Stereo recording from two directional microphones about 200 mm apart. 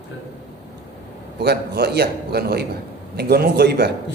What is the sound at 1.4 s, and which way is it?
A man's voice, 55° right (ahead or behind).